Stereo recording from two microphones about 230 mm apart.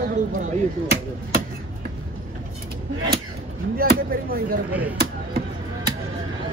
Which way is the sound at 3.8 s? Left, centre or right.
Right.